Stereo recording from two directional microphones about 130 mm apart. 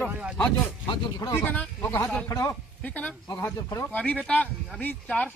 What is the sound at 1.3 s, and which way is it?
A man's voice, 15° left (ahead or behind).